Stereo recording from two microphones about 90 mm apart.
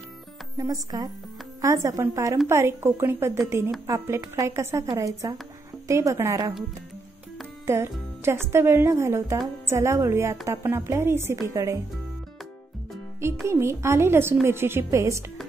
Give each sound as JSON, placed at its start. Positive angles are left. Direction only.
{"t": 0.6, "sound": "a woman's voice", "side_deg": -45}
{"t": 7.6, "sound": "a woman's voice", "side_deg": -30}
{"t": 13.5, "sound": "speech", "side_deg": -30}